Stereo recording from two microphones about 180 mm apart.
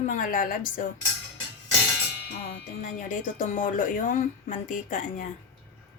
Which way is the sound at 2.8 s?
45° left (ahead or behind).